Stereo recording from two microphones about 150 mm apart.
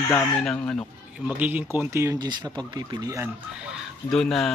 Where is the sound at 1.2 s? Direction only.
10° right (ahead or behind); by 3.2 s 25° right (ahead or behind).